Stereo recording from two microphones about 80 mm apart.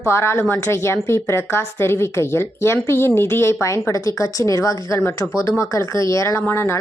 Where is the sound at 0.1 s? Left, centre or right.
Left.